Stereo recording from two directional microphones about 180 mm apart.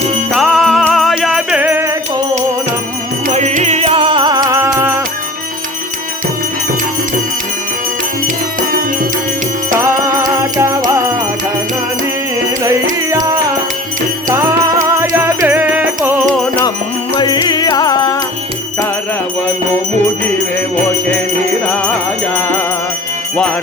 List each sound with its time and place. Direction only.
0.3 s music: centre (ahead or behind)
3.2 s music: 40° right (ahead or behind); by 4.9 s 15° right (ahead or behind)
9.7 s music: 15° right (ahead or behind)
12.6 s music: 20° right (ahead or behind)
17.2 s music: 25° left (ahead or behind)
22.4 s music: 10° left (ahead or behind)